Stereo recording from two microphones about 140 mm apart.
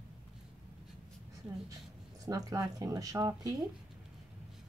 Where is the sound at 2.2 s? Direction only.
25° right (ahead or behind).